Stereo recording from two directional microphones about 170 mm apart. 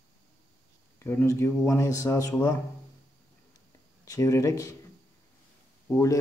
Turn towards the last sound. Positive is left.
turn(degrees=20)  # may be behind; listen again after turning